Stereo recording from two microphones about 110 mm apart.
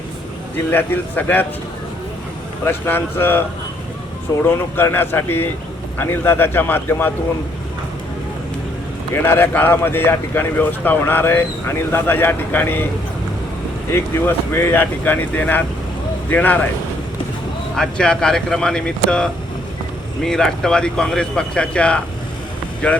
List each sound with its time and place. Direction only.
0.7 s speech: 20° left (ahead or behind)
2.6 s speech: 20° left (ahead or behind)
4.4 s speech: 20° left (ahead or behind)
9.1 s speech: 20° left (ahead or behind)
13.9 s speech: 20° left (ahead or behind)
17.7 s speech: 5° left (ahead or behind)